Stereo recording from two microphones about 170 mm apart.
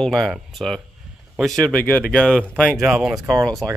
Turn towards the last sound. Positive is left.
turn(degrees=0)  # may be behind; listen again after turning